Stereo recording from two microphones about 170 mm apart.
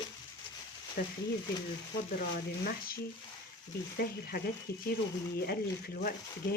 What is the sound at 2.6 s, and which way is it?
Speech, 60° left (ahead or behind).